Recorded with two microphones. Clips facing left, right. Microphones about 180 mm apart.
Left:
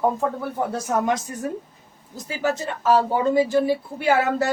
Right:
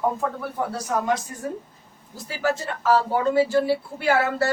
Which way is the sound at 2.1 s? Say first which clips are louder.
Left 1 dB; 20° left (ahead or behind).